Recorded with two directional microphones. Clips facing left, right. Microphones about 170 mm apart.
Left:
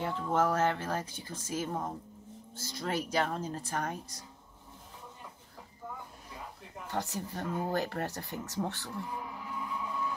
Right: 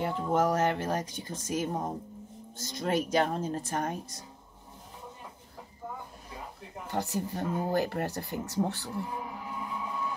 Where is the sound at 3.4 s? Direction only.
55° right (ahead or behind).